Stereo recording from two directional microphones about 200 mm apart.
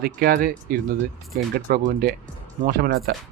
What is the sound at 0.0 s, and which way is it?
Speech, 50° right (ahead or behind).